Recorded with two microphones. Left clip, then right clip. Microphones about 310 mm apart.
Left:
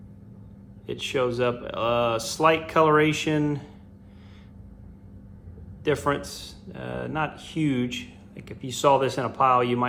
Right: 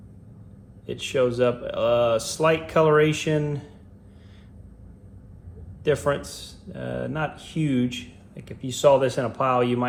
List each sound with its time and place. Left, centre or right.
0.9 s speech: left
5.8 s speech: left